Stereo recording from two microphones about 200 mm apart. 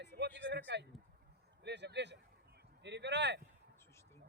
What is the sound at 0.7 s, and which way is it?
Speech, 60° right (ahead or behind).